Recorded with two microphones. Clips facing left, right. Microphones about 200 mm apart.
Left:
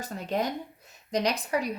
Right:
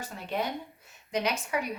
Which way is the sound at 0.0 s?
40° left (ahead or behind).